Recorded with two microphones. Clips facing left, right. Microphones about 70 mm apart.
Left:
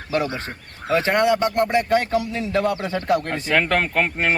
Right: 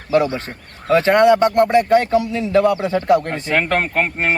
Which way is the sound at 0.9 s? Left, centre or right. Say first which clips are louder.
Right 6 dB; right.